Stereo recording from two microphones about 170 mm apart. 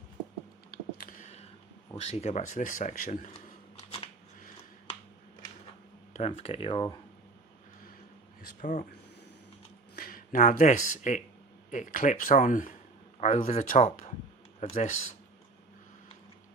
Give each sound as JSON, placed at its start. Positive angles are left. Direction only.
{"t": 0.7, "sound": "a sound", "side_deg": 60}
{"t": 1.2, "sound": "a sound", "side_deg": 40}
{"t": 2.0, "sound": "speech", "side_deg": 40}
{"t": 6.1, "sound": "speech", "side_deg": 35}
{"t": 8.4, "sound": "speech", "side_deg": 55}
{"t": 9.9, "sound": "speech", "side_deg": 55}